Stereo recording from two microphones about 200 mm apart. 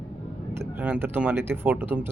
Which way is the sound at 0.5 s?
10° right (ahead or behind).